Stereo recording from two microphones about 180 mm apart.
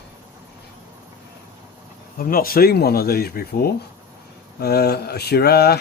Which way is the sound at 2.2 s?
55° left (ahead or behind).